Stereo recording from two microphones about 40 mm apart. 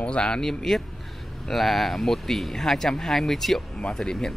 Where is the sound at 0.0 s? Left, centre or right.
Left.